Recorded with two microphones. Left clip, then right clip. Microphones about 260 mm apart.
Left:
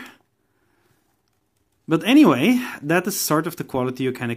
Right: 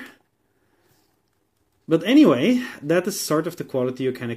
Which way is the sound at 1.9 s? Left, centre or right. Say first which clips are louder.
Even; centre.